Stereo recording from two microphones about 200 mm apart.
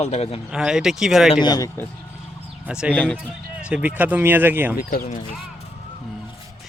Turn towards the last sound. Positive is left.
turn(degrees=45)  # may be behind; listen again after turning